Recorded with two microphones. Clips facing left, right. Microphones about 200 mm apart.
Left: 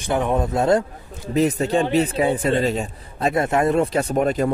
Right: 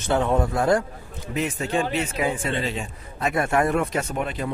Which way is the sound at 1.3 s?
35° left (ahead or behind).